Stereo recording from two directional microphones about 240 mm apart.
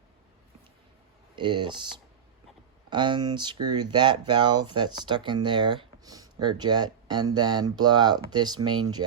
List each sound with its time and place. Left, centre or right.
1.4 s speech: centre
2.9 s speech: centre